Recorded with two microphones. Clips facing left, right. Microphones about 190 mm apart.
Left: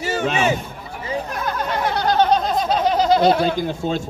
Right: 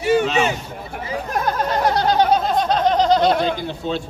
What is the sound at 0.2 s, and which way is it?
Speech, 55° left (ahead or behind).